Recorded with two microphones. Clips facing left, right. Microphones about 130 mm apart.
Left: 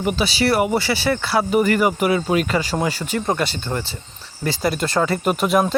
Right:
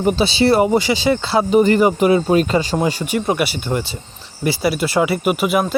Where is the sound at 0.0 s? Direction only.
30° right (ahead or behind).